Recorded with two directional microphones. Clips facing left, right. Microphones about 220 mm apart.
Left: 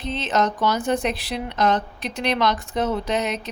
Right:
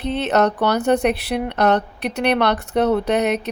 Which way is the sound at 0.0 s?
65° right (ahead or behind).